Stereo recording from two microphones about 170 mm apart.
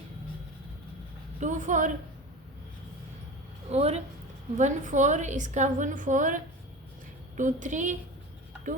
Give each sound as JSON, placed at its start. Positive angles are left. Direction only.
{"t": 1.4, "sound": "a woman's voice", "side_deg": -45}
{"t": 3.7, "sound": "a woman's voice", "side_deg": -40}